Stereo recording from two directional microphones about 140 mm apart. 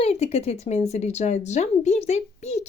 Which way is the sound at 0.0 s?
45° left (ahead or behind).